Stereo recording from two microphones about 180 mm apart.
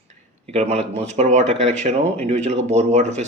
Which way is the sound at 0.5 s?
35° right (ahead or behind).